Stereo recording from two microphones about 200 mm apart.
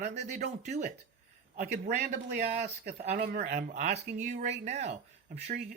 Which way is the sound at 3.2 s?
45° right (ahead or behind).